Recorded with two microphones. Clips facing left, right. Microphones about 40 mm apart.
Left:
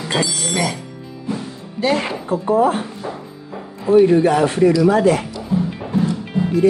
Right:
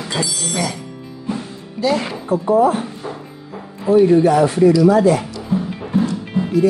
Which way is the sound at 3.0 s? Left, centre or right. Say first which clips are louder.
Left 1 dB; centre.